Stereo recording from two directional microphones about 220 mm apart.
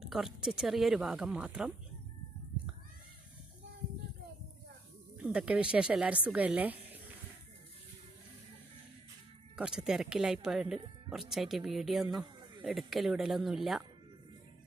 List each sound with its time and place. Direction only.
0.0 s speech: centre (ahead or behind)
5.1 s speech: 5° right (ahead or behind)
9.6 s speech: 5° right (ahead or behind)